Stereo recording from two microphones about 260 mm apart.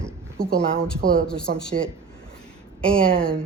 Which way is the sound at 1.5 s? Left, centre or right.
Right.